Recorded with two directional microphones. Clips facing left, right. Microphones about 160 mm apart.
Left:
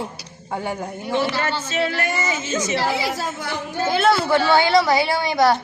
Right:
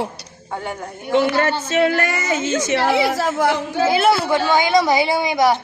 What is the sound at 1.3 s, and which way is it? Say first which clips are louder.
A woman's voice: right 5 dB; 50° right (ahead or behind).